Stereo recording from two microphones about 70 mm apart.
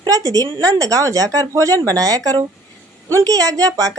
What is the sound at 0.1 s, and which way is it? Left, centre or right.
A woman's voice, right.